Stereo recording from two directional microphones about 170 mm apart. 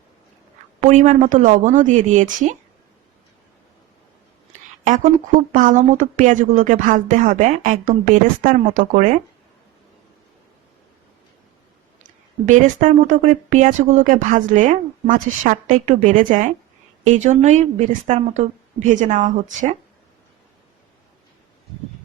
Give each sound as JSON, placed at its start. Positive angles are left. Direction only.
{"t": 0.8, "sound": "speech", "side_deg": -45}
{"t": 5.5, "sound": "speech", "side_deg": -50}
{"t": 12.0, "sound": "speech", "side_deg": -50}